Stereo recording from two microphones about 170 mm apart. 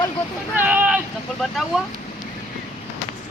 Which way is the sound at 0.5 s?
10° right (ahead or behind).